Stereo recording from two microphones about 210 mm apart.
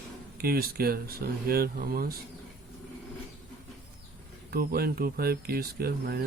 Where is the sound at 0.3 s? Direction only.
45° right (ahead or behind).